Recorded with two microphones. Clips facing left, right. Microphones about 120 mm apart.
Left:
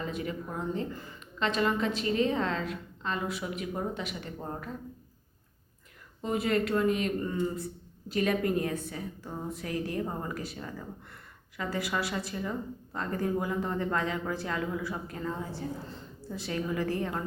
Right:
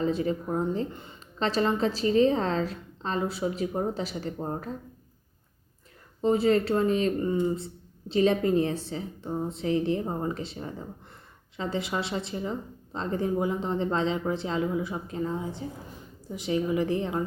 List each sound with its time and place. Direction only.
0.0 s a woman's voice: 30° right (ahead or behind)
6.2 s speech: 30° right (ahead or behind)